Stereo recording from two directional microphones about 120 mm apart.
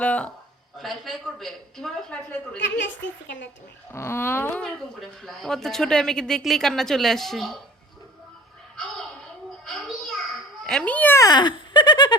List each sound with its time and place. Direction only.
0.0 s speech: 10° left (ahead or behind)
0.8 s speech: centre (ahead or behind)
3.9 s a sound: 20° left (ahead or behind)
4.6 s speech: 5° left (ahead or behind)
8.7 s a sound: 5° left (ahead or behind)
9.6 s children playing: 5° left (ahead or behind)
11.2 s speech: 35° left (ahead or behind)